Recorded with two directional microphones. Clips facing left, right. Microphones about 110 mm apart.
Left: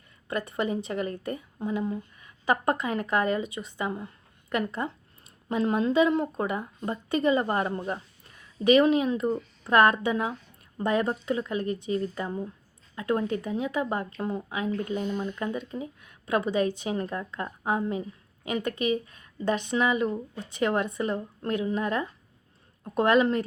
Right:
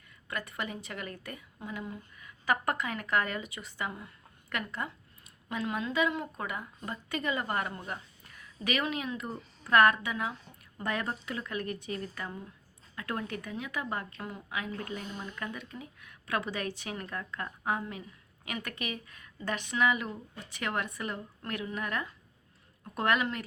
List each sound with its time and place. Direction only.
0.3 s a woman's voice: 25° left (ahead or behind)
15.0 s speech: 45° left (ahead or behind)
15.3 s a woman's voice: 25° left (ahead or behind)